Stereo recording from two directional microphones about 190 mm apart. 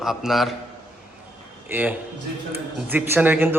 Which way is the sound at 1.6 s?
10° right (ahead or behind).